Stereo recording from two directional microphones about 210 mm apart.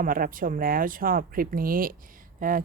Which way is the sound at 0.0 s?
40° right (ahead or behind).